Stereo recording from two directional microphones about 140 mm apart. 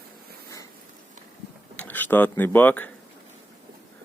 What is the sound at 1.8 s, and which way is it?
Speech, 10° left (ahead or behind).